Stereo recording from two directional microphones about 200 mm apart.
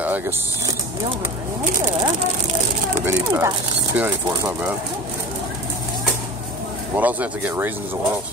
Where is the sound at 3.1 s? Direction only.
15° right (ahead or behind).